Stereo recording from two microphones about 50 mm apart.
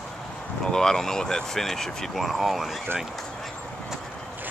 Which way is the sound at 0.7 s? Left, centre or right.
Centre.